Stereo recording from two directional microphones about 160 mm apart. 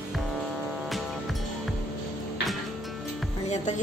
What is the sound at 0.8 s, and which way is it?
Music, centre (ahead or behind).